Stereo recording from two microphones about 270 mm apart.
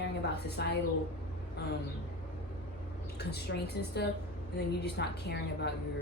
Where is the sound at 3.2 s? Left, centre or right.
Left.